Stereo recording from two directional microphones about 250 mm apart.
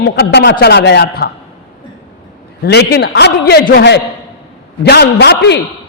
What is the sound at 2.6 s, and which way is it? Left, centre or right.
A woman's voice, left.